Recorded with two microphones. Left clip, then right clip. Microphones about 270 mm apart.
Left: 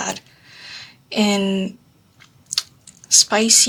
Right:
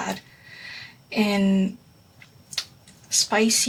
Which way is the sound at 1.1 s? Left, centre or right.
Left.